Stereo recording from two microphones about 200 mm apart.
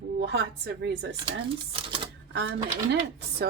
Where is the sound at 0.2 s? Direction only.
55° right (ahead or behind).